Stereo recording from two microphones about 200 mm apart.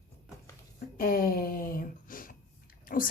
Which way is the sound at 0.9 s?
45° left (ahead or behind).